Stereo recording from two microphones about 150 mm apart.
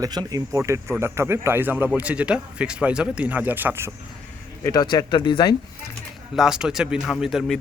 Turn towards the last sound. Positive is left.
turn(degrees=0)  # may be behind; listen again after turning